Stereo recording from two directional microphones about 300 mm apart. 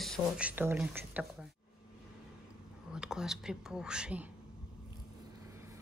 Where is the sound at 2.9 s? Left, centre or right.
Centre.